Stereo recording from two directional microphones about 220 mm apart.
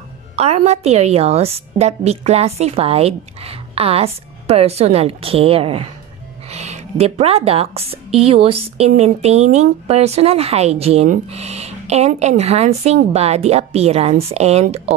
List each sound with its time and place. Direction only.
0.4 s speech: 30° right (ahead or behind)